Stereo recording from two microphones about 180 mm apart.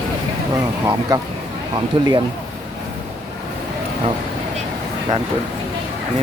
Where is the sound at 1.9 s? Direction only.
25° right (ahead or behind).